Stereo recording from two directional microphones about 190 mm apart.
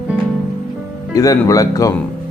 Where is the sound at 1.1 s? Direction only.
15° left (ahead or behind).